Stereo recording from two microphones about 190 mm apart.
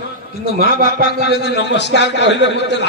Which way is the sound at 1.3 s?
65° left (ahead or behind).